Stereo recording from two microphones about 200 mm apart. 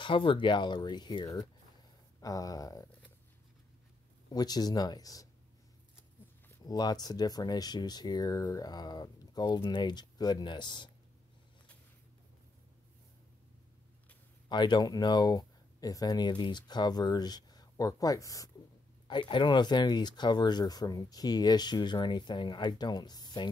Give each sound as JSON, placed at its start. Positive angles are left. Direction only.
{"t": 0.0, "sound": "speech", "side_deg": 25}
{"t": 4.3, "sound": "speech", "side_deg": 20}
{"t": 6.5, "sound": "speech", "side_deg": 20}
{"t": 14.5, "sound": "speech", "side_deg": 20}